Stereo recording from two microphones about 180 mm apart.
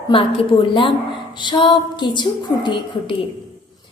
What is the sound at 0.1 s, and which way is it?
A woman's voice, 30° left (ahead or behind).